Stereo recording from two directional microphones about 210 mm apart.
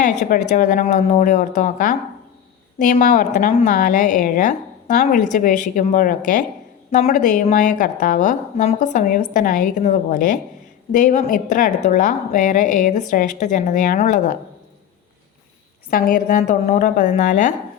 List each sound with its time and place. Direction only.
0.0 s a woman's voice: 40° left (ahead or behind)
15.9 s a woman's voice: 45° left (ahead or behind)